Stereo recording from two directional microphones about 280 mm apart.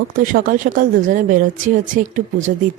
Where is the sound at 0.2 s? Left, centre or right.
Right.